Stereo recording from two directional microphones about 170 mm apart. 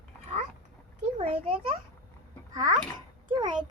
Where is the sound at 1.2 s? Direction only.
40° right (ahead or behind).